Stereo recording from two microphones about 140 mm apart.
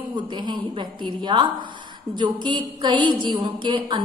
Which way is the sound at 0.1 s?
35° right (ahead or behind).